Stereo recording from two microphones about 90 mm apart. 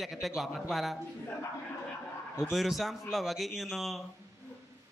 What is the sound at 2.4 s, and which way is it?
A man's voice, centre (ahead or behind).